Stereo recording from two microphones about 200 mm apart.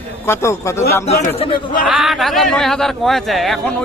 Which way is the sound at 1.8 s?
Centre (ahead or behind).